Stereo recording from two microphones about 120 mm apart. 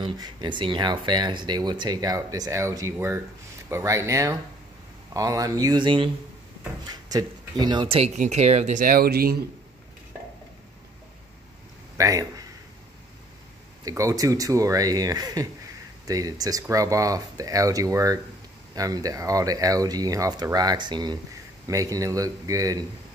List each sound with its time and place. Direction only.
0.0 s speech: 40° right (ahead or behind)
8.2 s speech: 65° right (ahead or behind)
12.0 s speech: 30° right (ahead or behind)
13.8 s speech: 30° right (ahead or behind)